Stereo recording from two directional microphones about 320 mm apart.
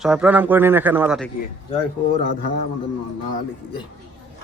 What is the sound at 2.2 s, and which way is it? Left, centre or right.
Speech, left.